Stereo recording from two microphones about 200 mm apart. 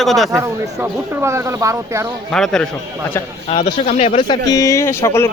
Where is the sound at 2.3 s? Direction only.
5° left (ahead or behind).